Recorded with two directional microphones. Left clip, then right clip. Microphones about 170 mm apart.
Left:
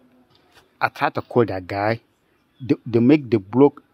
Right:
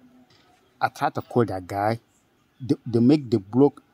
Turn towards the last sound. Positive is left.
turn(degrees=0)  # may be behind; listen again after turning